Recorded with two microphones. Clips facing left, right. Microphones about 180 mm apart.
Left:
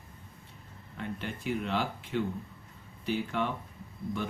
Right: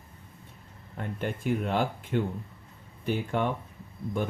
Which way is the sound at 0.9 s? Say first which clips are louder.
Right 4 dB; 50° right (ahead or behind).